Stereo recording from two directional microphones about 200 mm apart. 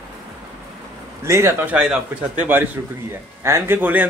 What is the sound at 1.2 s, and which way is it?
A man's voice, 15° right (ahead or behind).